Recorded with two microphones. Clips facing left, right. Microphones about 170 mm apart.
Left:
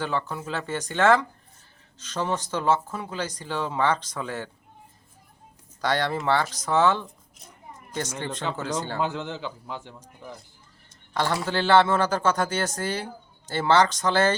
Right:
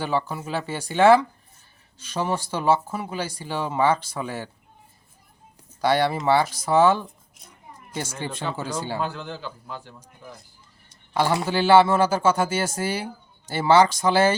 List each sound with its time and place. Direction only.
0.0 s speech: 10° right (ahead or behind)
5.8 s speech: 10° right (ahead or behind)
9.0 s a man's voice: 20° left (ahead or behind)
11.1 s speech: 10° right (ahead or behind)